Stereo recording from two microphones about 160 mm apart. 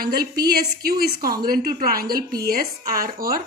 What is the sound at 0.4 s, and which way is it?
A woman's voice, 70° right (ahead or behind).